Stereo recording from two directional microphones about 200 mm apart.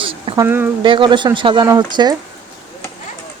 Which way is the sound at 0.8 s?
25° right (ahead or behind).